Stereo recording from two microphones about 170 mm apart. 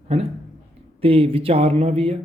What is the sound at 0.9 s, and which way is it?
Speech, 35° right (ahead or behind).